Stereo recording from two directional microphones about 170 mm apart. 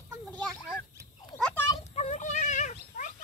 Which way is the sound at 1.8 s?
40° left (ahead or behind).